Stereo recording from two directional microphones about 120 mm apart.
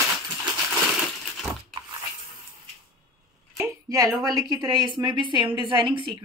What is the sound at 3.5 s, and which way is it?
A woman's voice, 25° right (ahead or behind).